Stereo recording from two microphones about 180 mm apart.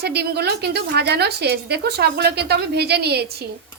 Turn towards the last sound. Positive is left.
turn(degrees=-65)  # may be behind; listen again after turning